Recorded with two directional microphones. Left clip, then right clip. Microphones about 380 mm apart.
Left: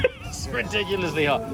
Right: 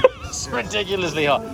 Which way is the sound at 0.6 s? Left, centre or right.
Centre.